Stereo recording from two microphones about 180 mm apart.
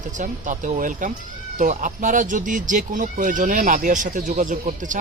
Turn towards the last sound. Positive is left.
turn(degrees=-45)  # may be behind; listen again after turning